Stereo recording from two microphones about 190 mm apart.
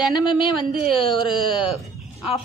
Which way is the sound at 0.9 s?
25° left (ahead or behind).